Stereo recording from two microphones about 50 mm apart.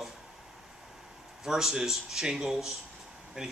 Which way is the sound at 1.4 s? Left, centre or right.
Centre.